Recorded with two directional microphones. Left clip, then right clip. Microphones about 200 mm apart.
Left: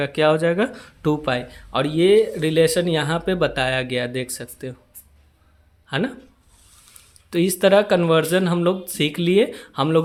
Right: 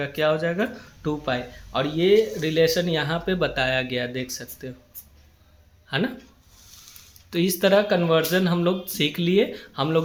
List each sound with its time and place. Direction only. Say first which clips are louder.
0.0 s speech: left 5 dB; 40° left (ahead or behind)
5.9 s speech: left 2 dB; 30° left (ahead or behind)
7.3 s speech: left 4 dB; 25° left (ahead or behind)